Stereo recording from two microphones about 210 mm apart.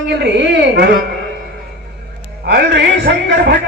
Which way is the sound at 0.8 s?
50° right (ahead or behind).